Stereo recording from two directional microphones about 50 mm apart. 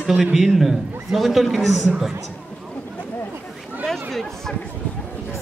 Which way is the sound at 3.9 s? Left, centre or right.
Centre.